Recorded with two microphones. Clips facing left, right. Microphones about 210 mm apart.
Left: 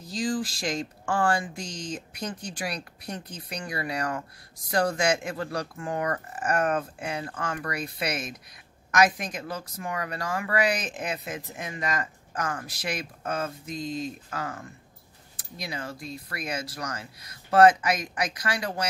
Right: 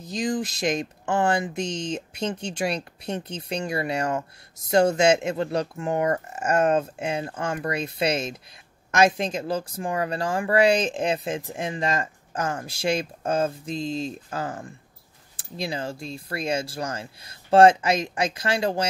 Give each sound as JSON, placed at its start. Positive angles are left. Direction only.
{"t": 0.0, "sound": "speech", "side_deg": -20}